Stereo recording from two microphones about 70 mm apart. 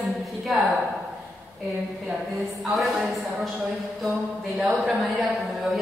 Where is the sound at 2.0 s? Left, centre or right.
Centre.